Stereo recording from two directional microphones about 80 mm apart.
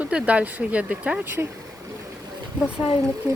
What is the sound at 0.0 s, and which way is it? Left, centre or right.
Speech, centre.